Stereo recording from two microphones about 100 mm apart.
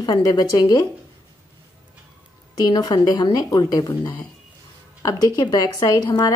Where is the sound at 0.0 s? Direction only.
45° left (ahead or behind).